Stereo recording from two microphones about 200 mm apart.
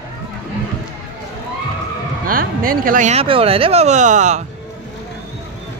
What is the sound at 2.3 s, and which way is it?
Speech, 45° right (ahead or behind).